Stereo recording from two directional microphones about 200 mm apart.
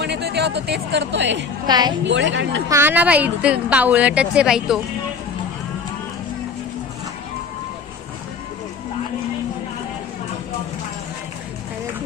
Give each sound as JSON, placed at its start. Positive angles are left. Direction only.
{"t": 0.0, "sound": "speech", "side_deg": -55}
{"t": 1.6, "sound": "a woman's voice", "side_deg": -20}
{"t": 2.0, "sound": "a woman's voice", "side_deg": -65}
{"t": 2.6, "sound": "a woman's voice", "side_deg": -10}